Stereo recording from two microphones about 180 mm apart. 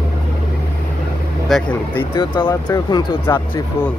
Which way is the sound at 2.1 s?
25° left (ahead or behind).